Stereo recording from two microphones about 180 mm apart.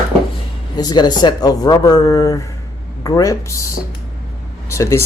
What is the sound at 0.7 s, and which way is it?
Speech, 20° left (ahead or behind).